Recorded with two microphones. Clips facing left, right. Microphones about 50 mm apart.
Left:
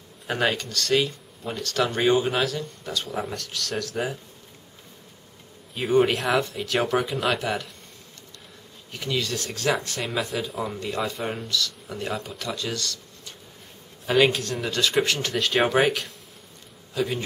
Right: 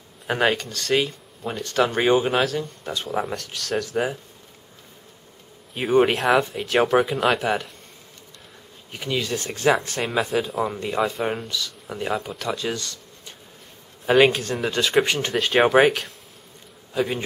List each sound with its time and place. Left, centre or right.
0.3 s speech: centre
2.3 s speech: centre
2.8 s speech: right
3.1 s speech: centre
3.8 s speech: centre
5.8 s speech: centre
8.9 s speech: centre
9.8 s speech: centre
10.7 s speech: centre
12.6 s speech: centre
14.0 s speech: centre
16.9 s a man's voice: centre